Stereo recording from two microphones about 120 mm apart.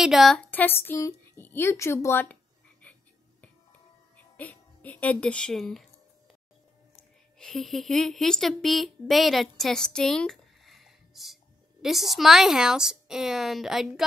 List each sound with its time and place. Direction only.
0.0 s a woman's voice: centre (ahead or behind)
0.5 s speech: 15° left (ahead or behind)
2.8 s frog: 10° left (ahead or behind)
4.2 s speech: 15° left (ahead or behind)
7.3 s a woman's voice: centre (ahead or behind)